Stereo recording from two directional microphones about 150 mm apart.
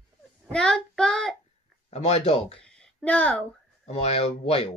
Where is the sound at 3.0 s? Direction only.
10° left (ahead or behind).